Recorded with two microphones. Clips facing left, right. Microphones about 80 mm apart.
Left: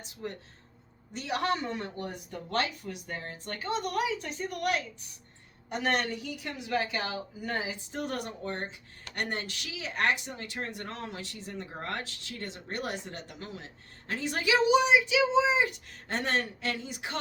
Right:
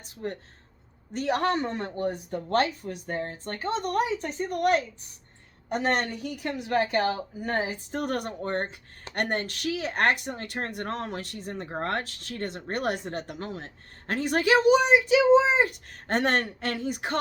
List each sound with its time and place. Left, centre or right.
0.0 s speech: right